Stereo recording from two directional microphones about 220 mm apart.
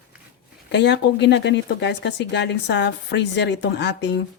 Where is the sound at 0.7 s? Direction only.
50° left (ahead or behind).